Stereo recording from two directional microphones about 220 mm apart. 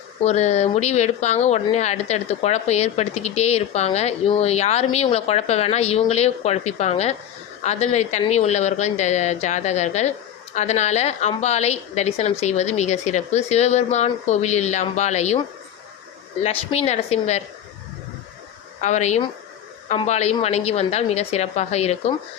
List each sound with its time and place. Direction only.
0.2 s a woman's voice: 30° left (ahead or behind)
16.4 s a woman's voice: 30° left (ahead or behind)
18.8 s a woman's voice: 30° left (ahead or behind)